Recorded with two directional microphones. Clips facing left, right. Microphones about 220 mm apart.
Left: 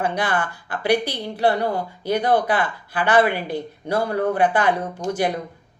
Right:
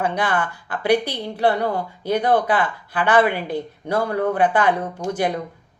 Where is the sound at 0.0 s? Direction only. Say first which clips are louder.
Right 1 dB; 10° left (ahead or behind).